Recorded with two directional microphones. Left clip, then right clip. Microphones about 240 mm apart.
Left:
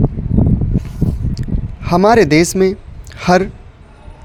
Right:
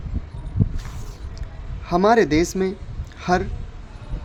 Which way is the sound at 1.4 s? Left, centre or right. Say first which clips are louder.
Left 13 dB; left.